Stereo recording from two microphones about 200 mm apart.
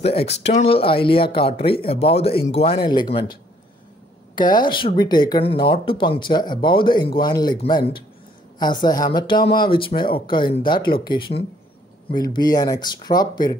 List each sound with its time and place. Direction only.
0.6 s speech: 30° left (ahead or behind)
4.4 s speech: 20° left (ahead or behind)